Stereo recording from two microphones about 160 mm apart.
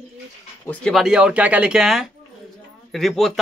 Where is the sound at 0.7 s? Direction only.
5° left (ahead or behind).